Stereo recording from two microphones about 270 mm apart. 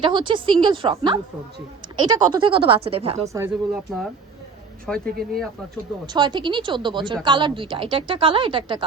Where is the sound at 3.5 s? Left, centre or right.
Centre.